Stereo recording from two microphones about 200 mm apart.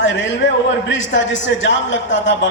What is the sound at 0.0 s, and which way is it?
A man's voice, 65° left (ahead or behind).